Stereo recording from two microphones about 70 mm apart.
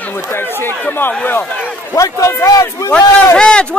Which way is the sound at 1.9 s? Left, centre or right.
Left.